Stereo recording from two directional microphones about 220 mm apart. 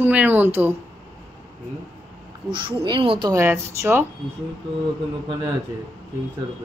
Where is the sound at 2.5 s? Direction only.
20° right (ahead or behind).